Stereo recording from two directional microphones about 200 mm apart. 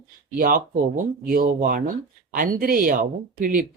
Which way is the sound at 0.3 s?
45° right (ahead or behind).